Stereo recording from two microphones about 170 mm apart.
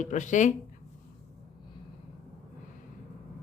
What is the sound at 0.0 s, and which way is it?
Speech, 45° left (ahead or behind).